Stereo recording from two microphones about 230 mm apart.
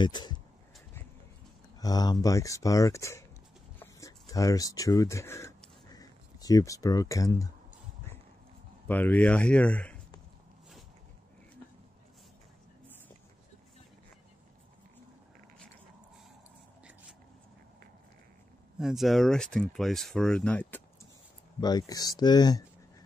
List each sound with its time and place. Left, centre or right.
0.0 s speech: centre
1.8 s speech: centre
3.8 s a sound: centre
8.8 s speech: centre
18.8 s speech: centre
21.5 s speech: centre